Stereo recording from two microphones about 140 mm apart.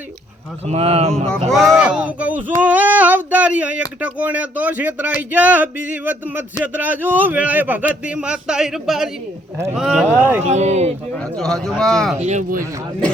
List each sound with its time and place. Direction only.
0.7 s speech: 45° right (ahead or behind)
1.5 s speech: centre (ahead or behind)
10.4 s speech: 55° right (ahead or behind)
11.2 s speech: 5° left (ahead or behind)
12.2 s speech: 60° right (ahead or behind)